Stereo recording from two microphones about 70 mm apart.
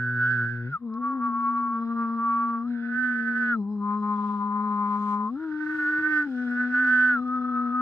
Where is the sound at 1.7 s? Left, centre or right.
Left.